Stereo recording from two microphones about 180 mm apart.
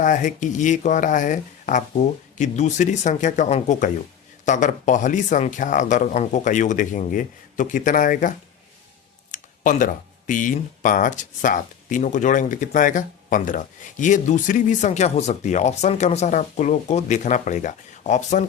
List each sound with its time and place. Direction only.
0.0 s speech: 45° left (ahead or behind)
9.3 s speech: 45° left (ahead or behind)